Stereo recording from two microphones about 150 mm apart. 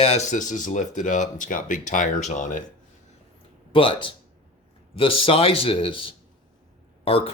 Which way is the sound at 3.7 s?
35° left (ahead or behind).